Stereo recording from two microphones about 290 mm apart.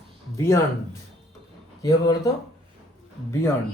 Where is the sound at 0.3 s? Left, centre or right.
Centre.